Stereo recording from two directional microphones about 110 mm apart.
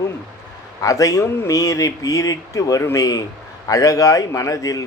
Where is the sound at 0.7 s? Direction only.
30° left (ahead or behind).